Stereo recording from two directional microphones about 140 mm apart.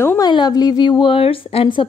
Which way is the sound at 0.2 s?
30° left (ahead or behind).